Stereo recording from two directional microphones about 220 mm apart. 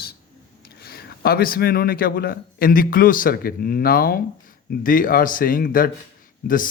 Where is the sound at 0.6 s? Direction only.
45° left (ahead or behind).